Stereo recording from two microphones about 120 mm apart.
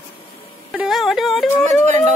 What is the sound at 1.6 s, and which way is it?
Speech, 80° right.